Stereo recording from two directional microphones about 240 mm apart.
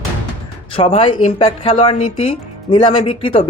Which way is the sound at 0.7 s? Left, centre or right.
Left.